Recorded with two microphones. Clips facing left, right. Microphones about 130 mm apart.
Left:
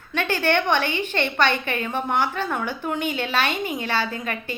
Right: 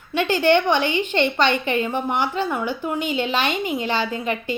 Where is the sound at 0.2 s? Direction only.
15° right (ahead or behind).